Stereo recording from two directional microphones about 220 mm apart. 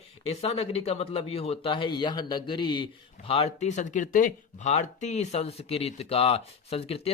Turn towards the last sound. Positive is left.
turn(degrees=25)  # may be behind; listen again after turning